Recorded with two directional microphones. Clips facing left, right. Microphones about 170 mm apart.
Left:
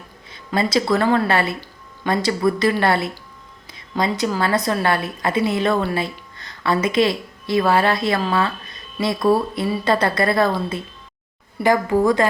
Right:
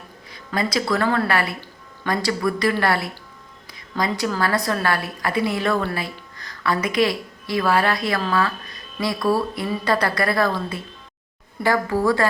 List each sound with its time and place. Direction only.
0.3 s a woman's voice: 25° left (ahead or behind)
3.7 s a sound: 25° left (ahead or behind)
4.4 s a woman's voice: 20° left (ahead or behind)